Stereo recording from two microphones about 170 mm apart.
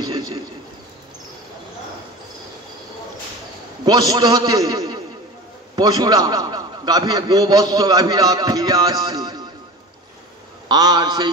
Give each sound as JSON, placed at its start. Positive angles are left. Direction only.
{"t": 0.0, "sound": "a sound", "side_deg": -25}
{"t": 3.8, "sound": "a man's voice", "side_deg": -25}
{"t": 10.7, "sound": "a man's voice", "side_deg": -25}